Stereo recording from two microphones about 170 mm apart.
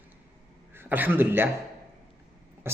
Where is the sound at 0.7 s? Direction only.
10° right (ahead or behind).